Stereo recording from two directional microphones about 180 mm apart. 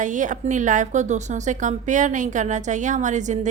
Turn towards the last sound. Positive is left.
turn(degrees=-40)  # may be behind; listen again after turning